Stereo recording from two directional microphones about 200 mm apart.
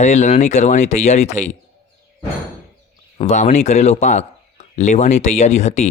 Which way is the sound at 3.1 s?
35° left (ahead or behind).